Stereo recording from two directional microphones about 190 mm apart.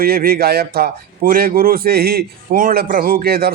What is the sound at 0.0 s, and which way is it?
A man's voice, 50° right (ahead or behind).